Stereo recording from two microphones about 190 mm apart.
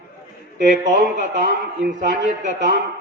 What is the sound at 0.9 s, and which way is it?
A man's voice, 50° right (ahead or behind).